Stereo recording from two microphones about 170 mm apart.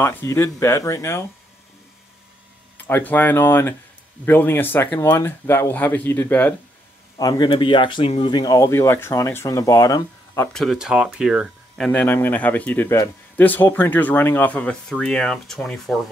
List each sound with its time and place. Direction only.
0.0 s speech: 15° left (ahead or behind)
2.8 s speech: 10° left (ahead or behind)
7.2 s speech: 25° left (ahead or behind)
10.5 s speech: centre (ahead or behind)
11.9 s speech: 10° left (ahead or behind)